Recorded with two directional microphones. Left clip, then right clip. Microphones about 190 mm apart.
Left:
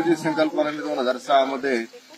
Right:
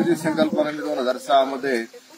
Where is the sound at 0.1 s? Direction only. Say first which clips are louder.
Even; centre (ahead or behind).